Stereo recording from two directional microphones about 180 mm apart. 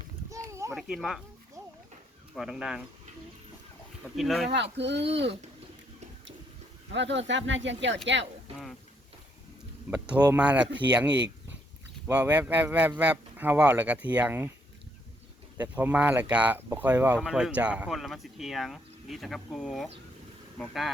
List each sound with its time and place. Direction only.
0.3 s a sound: 15° right (ahead or behind)
0.7 s speech: 5° right (ahead or behind)
2.3 s speech: 5° right (ahead or behind)
4.2 s speech: centre (ahead or behind)
4.4 s speech: 75° right (ahead or behind)
6.9 s speech: 80° right
10.3 s speech: 5° right (ahead or behind)
15.6 s speech: 10° right (ahead or behind)